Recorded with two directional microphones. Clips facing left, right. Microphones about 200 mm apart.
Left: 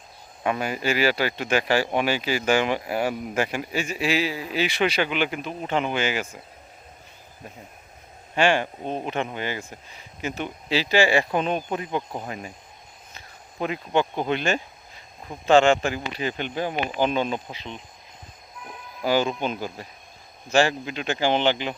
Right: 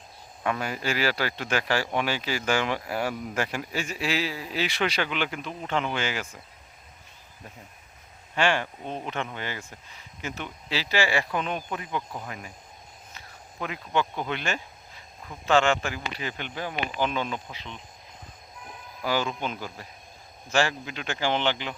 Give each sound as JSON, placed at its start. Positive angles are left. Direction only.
{"t": 0.4, "sound": "speech", "side_deg": 15}
{"t": 8.4, "sound": "speech", "side_deg": 15}
{"t": 8.6, "sound": "speech", "side_deg": 30}
{"t": 19.0, "sound": "speech", "side_deg": 20}